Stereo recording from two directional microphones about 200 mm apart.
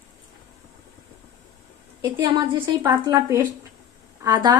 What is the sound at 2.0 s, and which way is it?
A woman's voice, 15° right (ahead or behind).